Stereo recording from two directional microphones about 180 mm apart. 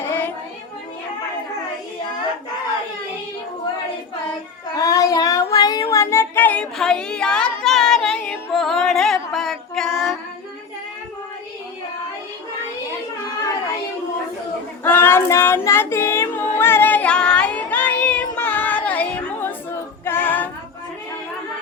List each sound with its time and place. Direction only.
0.0 s music: 10° left (ahead or behind)
4.7 s child singing: 20° left (ahead or behind)
7.6 s music: centre (ahead or behind)
14.8 s child singing: 10° left (ahead or behind)
16.6 s music: 10° left (ahead or behind)
20.1 s female singing: 10° left (ahead or behind)